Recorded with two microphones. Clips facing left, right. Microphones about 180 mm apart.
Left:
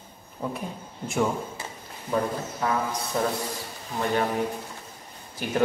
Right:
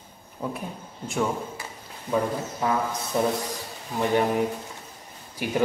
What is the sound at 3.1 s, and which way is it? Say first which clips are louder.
Speech: right 3 dB; 15° right (ahead or behind).